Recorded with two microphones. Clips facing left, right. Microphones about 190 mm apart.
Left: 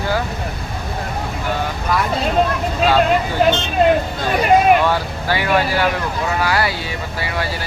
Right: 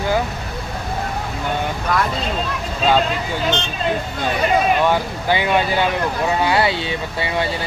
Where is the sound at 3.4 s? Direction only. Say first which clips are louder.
Left 7 dB; 65° left (ahead or behind).